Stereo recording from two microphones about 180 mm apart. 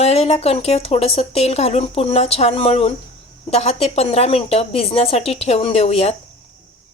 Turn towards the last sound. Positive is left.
turn(degrees=35)  # may be behind; listen again after turning